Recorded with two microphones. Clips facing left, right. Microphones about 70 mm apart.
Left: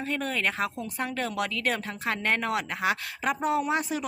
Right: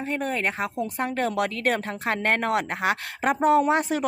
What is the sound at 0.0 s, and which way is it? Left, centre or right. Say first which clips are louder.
Speech: right 2 dB; right.